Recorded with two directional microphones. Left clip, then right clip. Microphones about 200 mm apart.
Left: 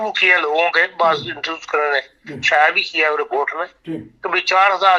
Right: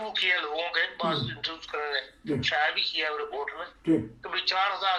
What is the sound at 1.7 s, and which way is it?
Speech, 35° left (ahead or behind).